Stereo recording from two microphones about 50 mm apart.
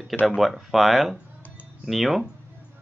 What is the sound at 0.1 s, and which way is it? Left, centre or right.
Speech, left.